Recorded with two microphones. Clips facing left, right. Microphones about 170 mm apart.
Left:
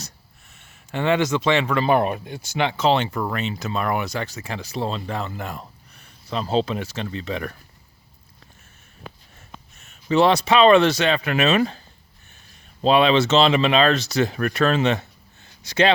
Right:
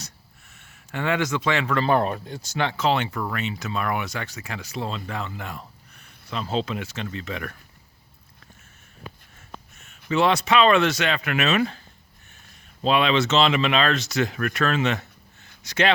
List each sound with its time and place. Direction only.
0.5 s speech: 25° left (ahead or behind)
10.1 s speech: 35° left (ahead or behind)
12.8 s speech: 30° left (ahead or behind)